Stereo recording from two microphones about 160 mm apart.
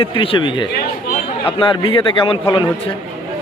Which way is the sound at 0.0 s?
35° left (ahead or behind).